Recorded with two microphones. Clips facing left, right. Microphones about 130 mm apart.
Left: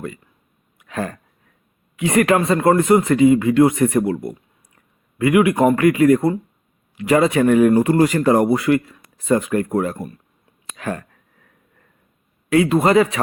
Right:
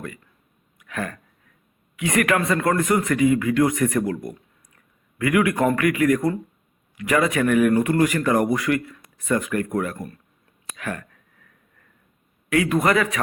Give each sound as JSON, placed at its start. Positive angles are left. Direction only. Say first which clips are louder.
{"t": 0.8, "sound": "a sound", "louder": "left 4 dB", "side_deg": 30}
{"t": 2.0, "sound": "speech", "louder": "left 5 dB", "side_deg": 30}
{"t": 12.5, "sound": "speech", "louder": "left 5 dB", "side_deg": 30}